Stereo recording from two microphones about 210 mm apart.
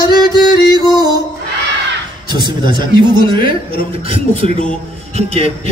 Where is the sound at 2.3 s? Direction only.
20° right (ahead or behind).